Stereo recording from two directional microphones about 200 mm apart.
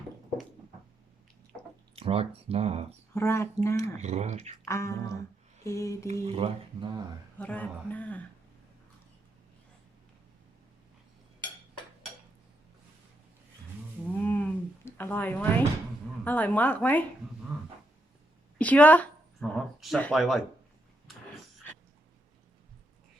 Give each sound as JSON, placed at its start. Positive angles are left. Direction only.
{"t": 2.0, "sound": "speech", "side_deg": -30}
{"t": 3.2, "sound": "speech", "side_deg": 15}
{"t": 3.8, "sound": "speech", "side_deg": -35}
{"t": 4.6, "sound": "speech", "side_deg": 15}
{"t": 6.2, "sound": "speech", "side_deg": -30}
{"t": 7.3, "sound": "speech", "side_deg": 5}
{"t": 14.2, "sound": "cattle", "side_deg": 10}
{"t": 16.2, "sound": "speech", "side_deg": 10}
{"t": 18.5, "sound": "speech", "side_deg": 5}